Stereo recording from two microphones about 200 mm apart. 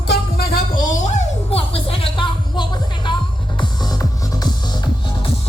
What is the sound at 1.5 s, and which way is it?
Music, 30° left (ahead or behind).